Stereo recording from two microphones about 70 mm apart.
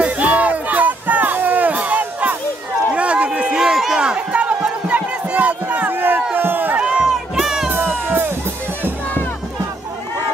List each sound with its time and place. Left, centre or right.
0.0 s music: right
2.9 s run: centre
3.3 s a sound: centre
6.3 s run: right
6.8 s run: centre
7.7 s music: right